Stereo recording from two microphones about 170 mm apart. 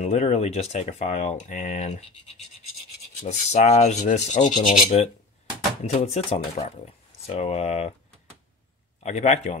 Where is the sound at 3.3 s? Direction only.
45° left (ahead or behind).